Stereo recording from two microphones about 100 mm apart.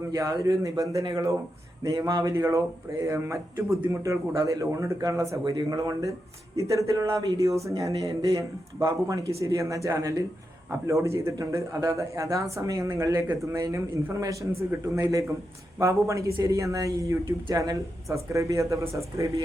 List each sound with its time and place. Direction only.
0.1 s speech: 35° right (ahead or behind)